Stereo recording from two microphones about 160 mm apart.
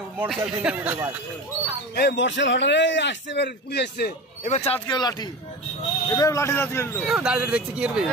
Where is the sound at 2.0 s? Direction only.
90° left.